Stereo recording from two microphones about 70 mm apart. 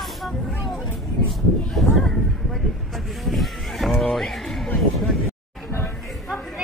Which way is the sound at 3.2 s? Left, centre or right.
Centre.